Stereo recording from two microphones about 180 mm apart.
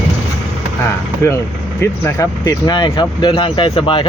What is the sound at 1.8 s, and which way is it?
Speech, 15° left (ahead or behind).